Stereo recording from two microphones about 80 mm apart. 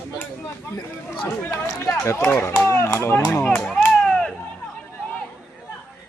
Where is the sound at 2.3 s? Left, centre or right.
Left.